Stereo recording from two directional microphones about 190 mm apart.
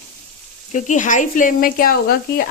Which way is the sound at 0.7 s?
40° left (ahead or behind).